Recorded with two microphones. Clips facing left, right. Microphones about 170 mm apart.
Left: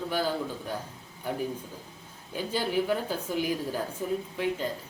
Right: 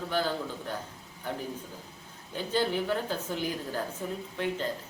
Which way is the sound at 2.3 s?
10° left (ahead or behind).